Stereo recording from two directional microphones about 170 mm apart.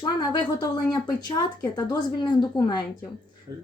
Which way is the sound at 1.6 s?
25° left (ahead or behind).